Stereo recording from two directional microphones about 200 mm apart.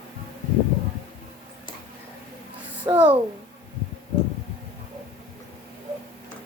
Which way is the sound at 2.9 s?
20° right (ahead or behind).